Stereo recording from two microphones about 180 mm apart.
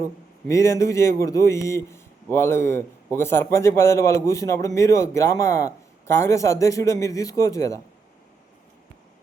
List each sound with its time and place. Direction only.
0.4 s speech: 15° left (ahead or behind)